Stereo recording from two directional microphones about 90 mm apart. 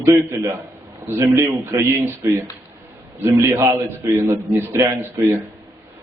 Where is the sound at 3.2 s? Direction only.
25° right (ahead or behind).